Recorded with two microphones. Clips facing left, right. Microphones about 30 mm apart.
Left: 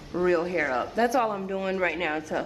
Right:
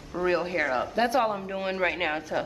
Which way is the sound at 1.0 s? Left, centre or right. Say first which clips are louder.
Left 1 dB; right.